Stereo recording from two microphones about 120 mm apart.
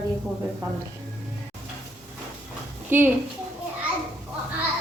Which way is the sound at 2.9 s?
15° right (ahead or behind).